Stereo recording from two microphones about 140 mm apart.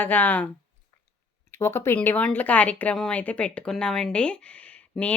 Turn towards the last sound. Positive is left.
turn(degrees=10)  # may be behind; listen again after turning